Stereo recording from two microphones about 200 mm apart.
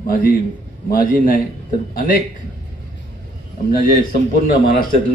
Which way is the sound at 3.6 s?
45° left (ahead or behind).